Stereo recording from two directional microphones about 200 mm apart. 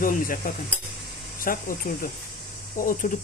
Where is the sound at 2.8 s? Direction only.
45° left (ahead or behind).